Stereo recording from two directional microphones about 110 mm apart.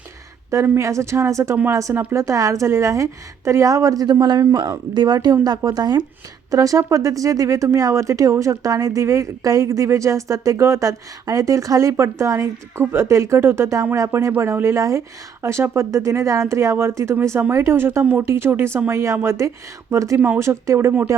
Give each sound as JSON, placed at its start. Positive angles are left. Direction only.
{"t": 0.5, "sound": "speech", "side_deg": -25}